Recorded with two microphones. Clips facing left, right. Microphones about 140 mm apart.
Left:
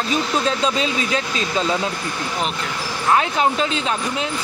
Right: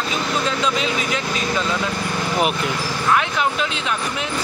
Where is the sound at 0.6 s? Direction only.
30° left (ahead or behind).